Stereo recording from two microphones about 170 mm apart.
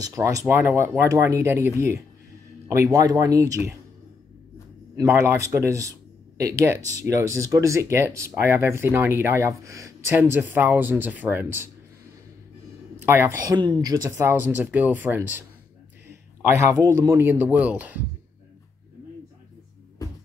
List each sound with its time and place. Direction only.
0.0 s speech: 20° right (ahead or behind)
2.7 s speech: 20° right (ahead or behind)
4.9 s speech: 15° right (ahead or behind)
13.0 s speech: 15° right (ahead or behind)
13.6 s speech: 25° right (ahead or behind)